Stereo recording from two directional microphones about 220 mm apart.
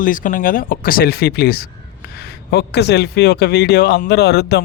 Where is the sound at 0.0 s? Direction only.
40° left (ahead or behind).